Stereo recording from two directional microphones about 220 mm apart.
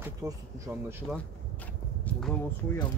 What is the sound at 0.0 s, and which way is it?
Speech, 15° right (ahead or behind).